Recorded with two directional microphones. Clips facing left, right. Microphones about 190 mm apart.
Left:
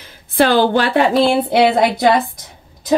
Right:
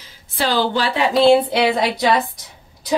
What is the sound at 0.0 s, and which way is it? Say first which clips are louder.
A woman's voice: left 8 dB; 55° left (ahead or behind).